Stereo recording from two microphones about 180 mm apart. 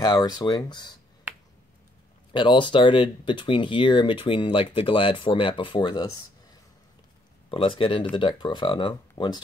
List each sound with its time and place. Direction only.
0.0 s speech: 20° left (ahead or behind)
2.3 s speech: 25° left (ahead or behind)
7.5 s speech: 30° left (ahead or behind)